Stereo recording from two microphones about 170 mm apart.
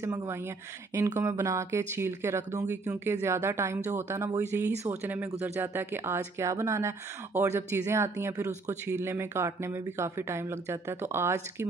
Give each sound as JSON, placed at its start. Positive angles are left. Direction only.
{"t": 0.0, "sound": "speech", "side_deg": -15}